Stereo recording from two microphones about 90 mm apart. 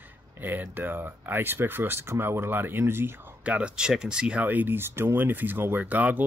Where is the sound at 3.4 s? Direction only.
10° right (ahead or behind).